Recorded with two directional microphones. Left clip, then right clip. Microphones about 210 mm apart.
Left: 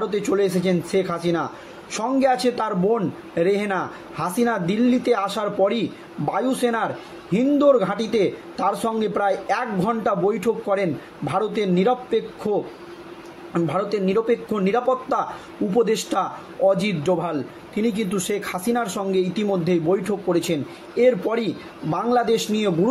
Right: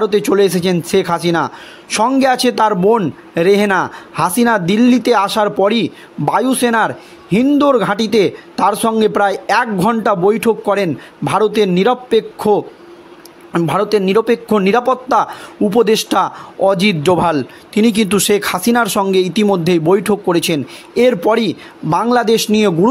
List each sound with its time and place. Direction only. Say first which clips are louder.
0.0 s speech: right 9 dB; 50° right (ahead or behind)